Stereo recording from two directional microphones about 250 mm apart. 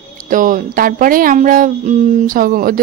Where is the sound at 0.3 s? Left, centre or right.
Right.